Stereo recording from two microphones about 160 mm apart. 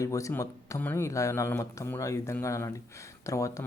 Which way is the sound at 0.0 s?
20° left (ahead or behind).